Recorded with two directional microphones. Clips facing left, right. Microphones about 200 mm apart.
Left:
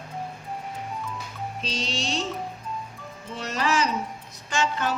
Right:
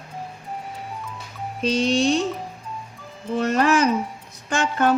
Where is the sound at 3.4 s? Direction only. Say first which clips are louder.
Right 7 dB; 55° right (ahead or behind).